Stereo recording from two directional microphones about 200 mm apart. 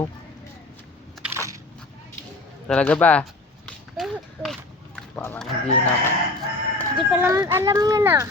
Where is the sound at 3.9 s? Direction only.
Centre (ahead or behind).